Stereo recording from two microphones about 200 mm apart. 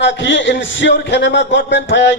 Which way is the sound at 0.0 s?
65° left (ahead or behind).